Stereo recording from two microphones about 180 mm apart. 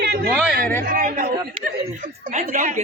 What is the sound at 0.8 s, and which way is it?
Speech, 50° right (ahead or behind).